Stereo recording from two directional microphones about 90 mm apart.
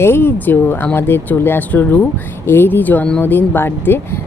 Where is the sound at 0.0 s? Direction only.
25° left (ahead or behind).